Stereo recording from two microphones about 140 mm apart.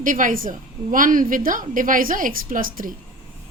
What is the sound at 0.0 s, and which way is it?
A woman's voice, 70° right (ahead or behind).